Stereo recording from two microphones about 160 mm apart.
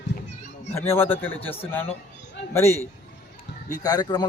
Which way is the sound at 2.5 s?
15° left (ahead or behind).